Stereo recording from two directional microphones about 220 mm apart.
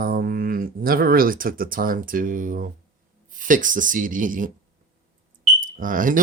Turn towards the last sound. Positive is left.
turn(degrees=-40)  # may be behind; listen again after turning